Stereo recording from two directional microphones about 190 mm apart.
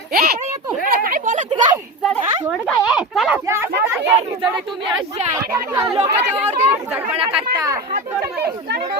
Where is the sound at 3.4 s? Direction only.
15° right (ahead or behind).